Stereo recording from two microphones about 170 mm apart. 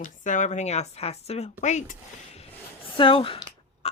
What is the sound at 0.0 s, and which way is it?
A woman's voice, 45° left (ahead or behind).